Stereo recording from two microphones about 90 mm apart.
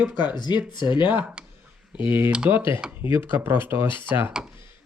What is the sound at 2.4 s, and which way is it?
Speech, 25° right (ahead or behind).